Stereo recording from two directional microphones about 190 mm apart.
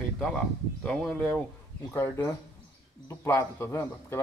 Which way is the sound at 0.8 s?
5° left (ahead or behind).